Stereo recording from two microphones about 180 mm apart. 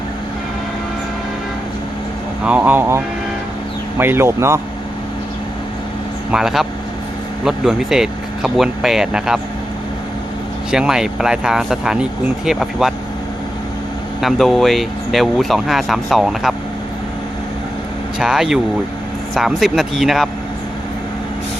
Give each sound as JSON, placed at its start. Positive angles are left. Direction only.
{"t": 2.4, "sound": "speech", "side_deg": -10}
{"t": 6.3, "sound": "speech", "side_deg": 0}
{"t": 10.7, "sound": "speech", "side_deg": -5}
{"t": 14.2, "sound": "speech", "side_deg": 0}
{"t": 18.2, "sound": "speech", "side_deg": -5}